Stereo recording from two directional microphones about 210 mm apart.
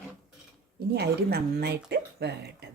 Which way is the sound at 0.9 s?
50° right (ahead or behind).